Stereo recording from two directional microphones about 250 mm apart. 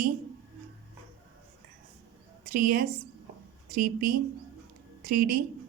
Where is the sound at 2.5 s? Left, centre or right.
Right.